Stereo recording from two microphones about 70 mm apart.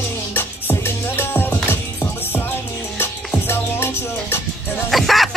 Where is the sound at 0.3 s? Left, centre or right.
Left.